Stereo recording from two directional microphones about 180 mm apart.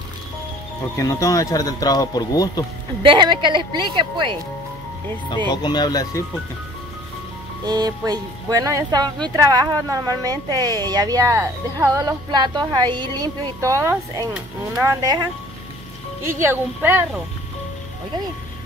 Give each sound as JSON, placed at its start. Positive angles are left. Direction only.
{"t": 0.9, "sound": "speech", "side_deg": 20}
{"t": 3.0, "sound": "speech", "side_deg": -25}
{"t": 5.5, "sound": "speech", "side_deg": 25}
{"t": 7.6, "sound": "speech", "side_deg": -20}
{"t": 16.3, "sound": "speech", "side_deg": -15}